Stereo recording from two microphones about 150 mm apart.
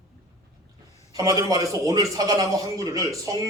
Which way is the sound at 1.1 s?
25° right (ahead or behind).